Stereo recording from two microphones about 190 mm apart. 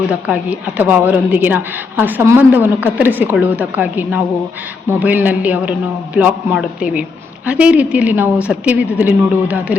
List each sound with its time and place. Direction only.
0.1 s a woman's voice: 5° right (ahead or behind)